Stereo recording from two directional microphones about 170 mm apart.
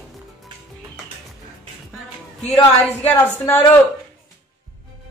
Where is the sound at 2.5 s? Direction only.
10° left (ahead or behind).